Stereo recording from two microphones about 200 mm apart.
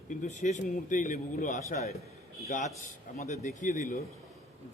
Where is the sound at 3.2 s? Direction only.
35° left (ahead or behind).